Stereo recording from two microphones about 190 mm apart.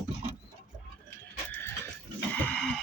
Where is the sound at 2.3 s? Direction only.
10° left (ahead or behind).